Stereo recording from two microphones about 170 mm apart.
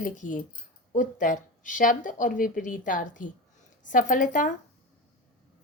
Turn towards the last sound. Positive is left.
turn(degrees=50)  # may be behind; listen again after turning